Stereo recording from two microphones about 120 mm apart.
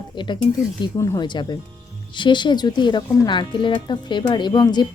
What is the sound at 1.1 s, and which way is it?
A woman's voice, 40° left (ahead or behind).